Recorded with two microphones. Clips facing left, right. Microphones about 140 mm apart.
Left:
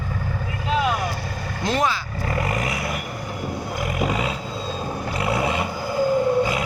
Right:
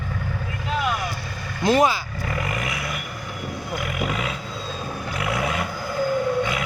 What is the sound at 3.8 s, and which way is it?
Roaring cats, 30° left (ahead or behind).